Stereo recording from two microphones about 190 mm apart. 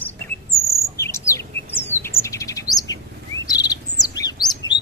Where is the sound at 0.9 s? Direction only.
15° left (ahead or behind).